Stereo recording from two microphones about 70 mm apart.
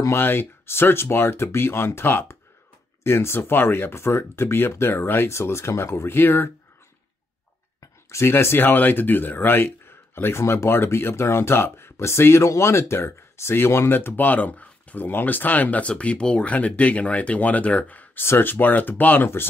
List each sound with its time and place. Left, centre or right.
0.1 s speech: left
8.1 s speech: left
18.2 s speech: left